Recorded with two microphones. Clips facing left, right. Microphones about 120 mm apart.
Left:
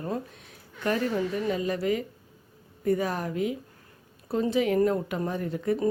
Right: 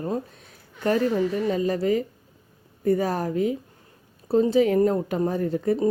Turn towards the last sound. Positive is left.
turn(degrees=-40)  # may be behind; listen again after turning